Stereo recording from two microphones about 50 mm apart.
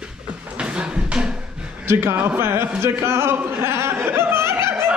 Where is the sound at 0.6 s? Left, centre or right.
Right.